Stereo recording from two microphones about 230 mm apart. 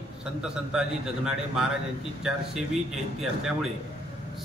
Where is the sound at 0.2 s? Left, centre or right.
Centre.